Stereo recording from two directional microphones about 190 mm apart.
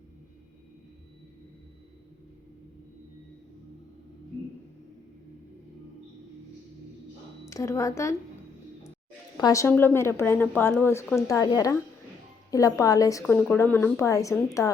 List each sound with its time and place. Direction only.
7.4 s a woman's voice: 15° left (ahead or behind)
9.4 s a woman's voice: 15° left (ahead or behind)